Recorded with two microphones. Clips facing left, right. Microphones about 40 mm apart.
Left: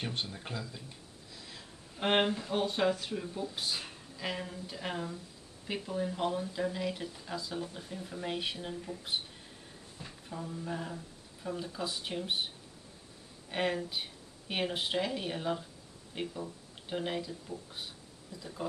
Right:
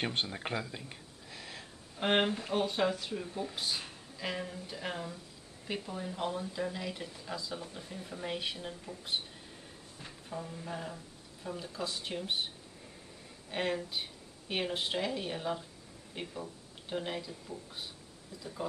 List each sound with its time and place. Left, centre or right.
0.0 s speech: right
2.0 s speech: centre
13.5 s speech: centre